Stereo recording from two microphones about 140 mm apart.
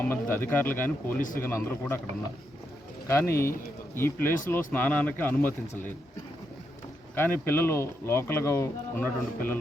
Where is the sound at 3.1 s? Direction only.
20° left (ahead or behind).